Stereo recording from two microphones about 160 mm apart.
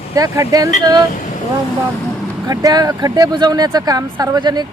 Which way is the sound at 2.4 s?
25° right (ahead or behind).